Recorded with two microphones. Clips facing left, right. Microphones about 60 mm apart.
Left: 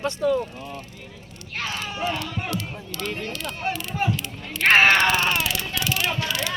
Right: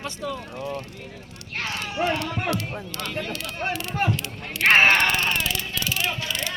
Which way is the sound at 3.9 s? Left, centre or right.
Right.